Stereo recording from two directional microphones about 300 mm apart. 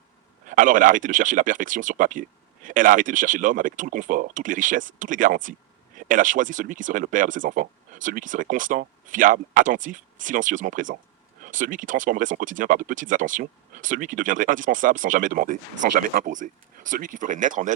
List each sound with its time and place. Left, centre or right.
0.4 s speech: right